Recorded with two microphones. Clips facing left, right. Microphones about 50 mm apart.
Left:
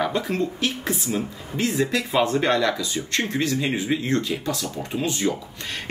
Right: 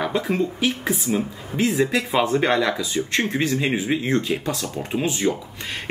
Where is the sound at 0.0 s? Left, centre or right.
Centre.